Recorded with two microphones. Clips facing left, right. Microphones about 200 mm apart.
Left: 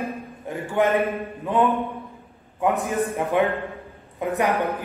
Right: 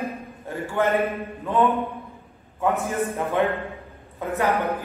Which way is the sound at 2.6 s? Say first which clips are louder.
Left 1 dB; 15° left (ahead or behind).